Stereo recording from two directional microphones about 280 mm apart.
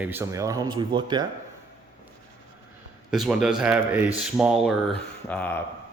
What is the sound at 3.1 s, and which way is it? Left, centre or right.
A man's voice, centre.